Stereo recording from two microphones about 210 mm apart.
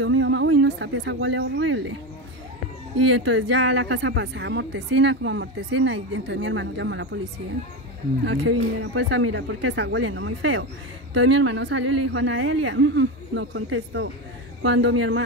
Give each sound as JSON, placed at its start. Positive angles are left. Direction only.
{"t": 0.0, "sound": "speech", "side_deg": -70}
{"t": 3.3, "sound": "speech", "side_deg": -65}
{"t": 8.2, "sound": "speech", "side_deg": -60}
{"t": 11.1, "sound": "a man's voice", "side_deg": -60}